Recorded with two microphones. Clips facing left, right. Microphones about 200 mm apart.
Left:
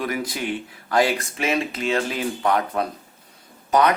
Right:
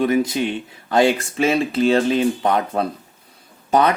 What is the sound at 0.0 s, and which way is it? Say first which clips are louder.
Speech: right 8 dB; 25° right (ahead or behind).